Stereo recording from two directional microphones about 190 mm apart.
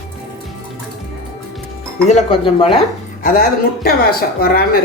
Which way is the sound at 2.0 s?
30° left (ahead or behind).